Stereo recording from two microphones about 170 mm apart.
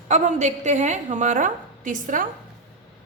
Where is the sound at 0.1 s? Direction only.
45° right (ahead or behind).